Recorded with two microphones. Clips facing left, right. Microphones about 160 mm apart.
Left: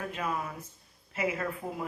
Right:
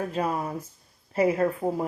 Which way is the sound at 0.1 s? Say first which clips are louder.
Right 6 dB; 35° right (ahead or behind).